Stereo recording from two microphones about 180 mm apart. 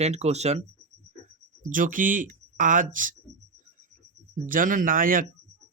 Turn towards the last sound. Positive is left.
turn(degrees=-50)  # may be behind; listen again after turning